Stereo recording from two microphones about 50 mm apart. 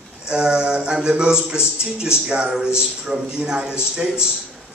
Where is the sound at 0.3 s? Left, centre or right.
Centre.